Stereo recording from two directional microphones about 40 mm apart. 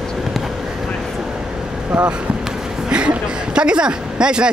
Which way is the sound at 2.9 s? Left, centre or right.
Right.